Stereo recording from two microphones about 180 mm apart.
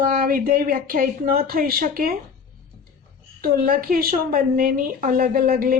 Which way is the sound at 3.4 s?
55° right (ahead or behind).